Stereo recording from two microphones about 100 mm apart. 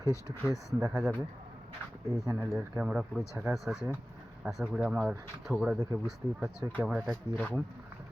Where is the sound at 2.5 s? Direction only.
10° right (ahead or behind).